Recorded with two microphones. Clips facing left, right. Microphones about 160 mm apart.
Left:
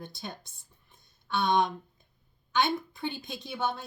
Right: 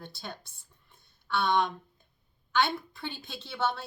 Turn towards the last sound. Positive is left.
turn(degrees=15)  # may be behind; listen again after turning